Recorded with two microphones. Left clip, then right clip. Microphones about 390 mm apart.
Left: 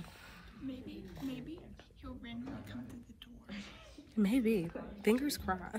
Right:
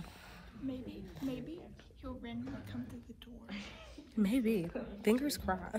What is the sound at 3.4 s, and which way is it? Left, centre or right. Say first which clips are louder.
Speech: right 2 dB; centre.